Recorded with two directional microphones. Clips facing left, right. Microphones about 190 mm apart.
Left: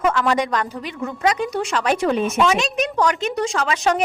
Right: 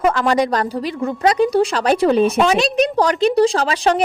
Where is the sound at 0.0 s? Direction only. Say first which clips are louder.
Right 3 dB; 35° right (ahead or behind).